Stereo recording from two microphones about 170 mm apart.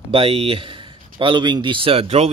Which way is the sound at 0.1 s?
30° right (ahead or behind).